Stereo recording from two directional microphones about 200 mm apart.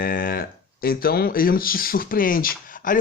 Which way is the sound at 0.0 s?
45° left (ahead or behind).